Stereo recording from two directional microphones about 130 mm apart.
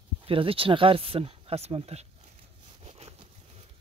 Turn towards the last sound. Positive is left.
turn(degrees=-50)  # may be behind; listen again after turning